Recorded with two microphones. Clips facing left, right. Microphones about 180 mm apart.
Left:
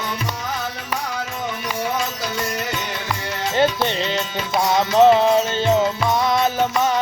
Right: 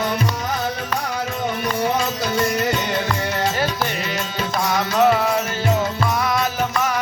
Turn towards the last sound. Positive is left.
turn(degrees=25)  # may be behind; listen again after turning